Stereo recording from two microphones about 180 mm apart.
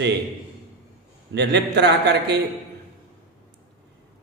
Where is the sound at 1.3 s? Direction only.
70° right (ahead or behind).